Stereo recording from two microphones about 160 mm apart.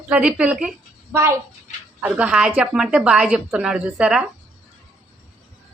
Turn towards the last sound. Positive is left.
turn(degrees=-5)  # may be behind; listen again after turning